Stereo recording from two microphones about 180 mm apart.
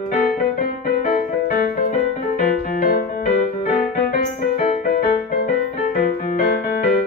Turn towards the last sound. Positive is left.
turn(degrees=50)  # may be behind; listen again after turning